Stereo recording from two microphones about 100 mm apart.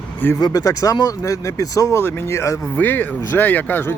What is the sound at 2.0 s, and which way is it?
Speech, 25° left (ahead or behind).